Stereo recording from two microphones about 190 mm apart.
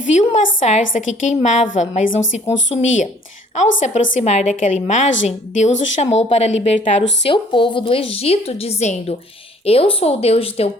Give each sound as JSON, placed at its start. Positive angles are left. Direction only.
{"t": 0.0, "sound": "a woman's voice", "side_deg": 40}
{"t": 7.2, "sound": "a woman's voice", "side_deg": 25}